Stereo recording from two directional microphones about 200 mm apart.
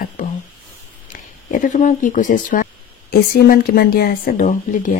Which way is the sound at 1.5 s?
40° left (ahead or behind).